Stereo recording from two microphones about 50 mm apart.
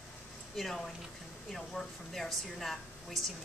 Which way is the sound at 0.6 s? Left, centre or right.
Centre.